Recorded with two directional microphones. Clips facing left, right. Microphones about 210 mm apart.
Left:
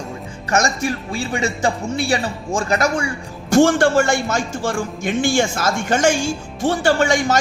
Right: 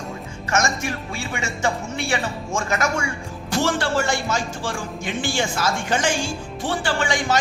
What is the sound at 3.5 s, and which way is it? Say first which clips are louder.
A woman's voice: left 9 dB; 50° left (ahead or behind).